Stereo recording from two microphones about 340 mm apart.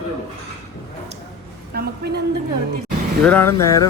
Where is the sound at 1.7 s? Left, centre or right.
Right.